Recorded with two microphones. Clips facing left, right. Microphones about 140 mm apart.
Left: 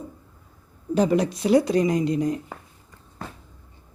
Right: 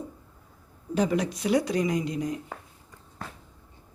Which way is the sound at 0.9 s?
35° left (ahead or behind).